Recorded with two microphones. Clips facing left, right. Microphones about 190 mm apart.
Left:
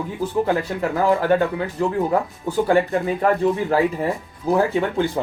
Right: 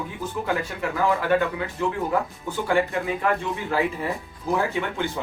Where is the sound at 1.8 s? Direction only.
40° left (ahead or behind).